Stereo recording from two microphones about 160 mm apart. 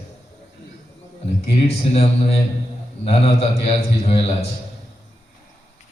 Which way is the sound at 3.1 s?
40° left (ahead or behind).